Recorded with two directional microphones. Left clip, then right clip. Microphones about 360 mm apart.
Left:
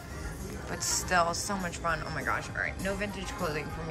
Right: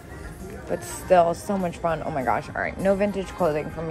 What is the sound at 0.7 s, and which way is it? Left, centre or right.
Speech, centre.